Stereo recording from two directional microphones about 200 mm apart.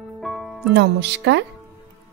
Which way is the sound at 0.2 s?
Centre (ahead or behind).